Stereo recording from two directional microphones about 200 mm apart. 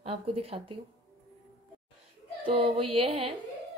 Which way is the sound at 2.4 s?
30° right (ahead or behind).